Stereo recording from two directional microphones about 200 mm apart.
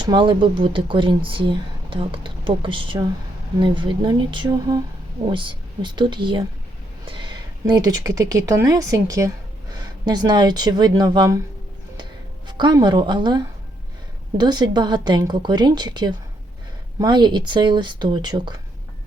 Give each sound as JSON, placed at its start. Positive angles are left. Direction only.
{"t": 0.0, "sound": "speech", "side_deg": -25}
{"t": 12.5, "sound": "speech", "side_deg": -20}